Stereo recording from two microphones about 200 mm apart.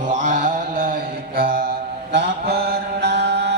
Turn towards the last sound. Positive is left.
turn(degrees=-60)  # may be behind; listen again after turning